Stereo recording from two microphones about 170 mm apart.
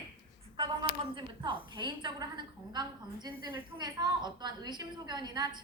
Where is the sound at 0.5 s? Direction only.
30° right (ahead or behind).